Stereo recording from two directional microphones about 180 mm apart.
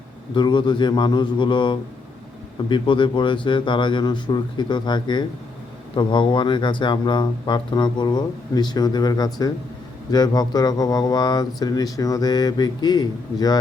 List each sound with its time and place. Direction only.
0.3 s speech: 25° left (ahead or behind)